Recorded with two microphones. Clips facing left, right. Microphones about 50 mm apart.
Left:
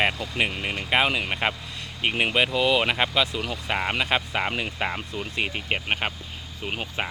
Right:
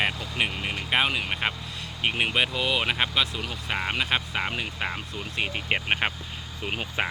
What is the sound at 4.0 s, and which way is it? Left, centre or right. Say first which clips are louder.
Speech: left 1 dB; left.